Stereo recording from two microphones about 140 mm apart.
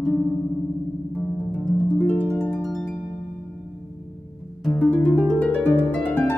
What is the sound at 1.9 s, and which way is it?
Harp, 15° left (ahead or behind).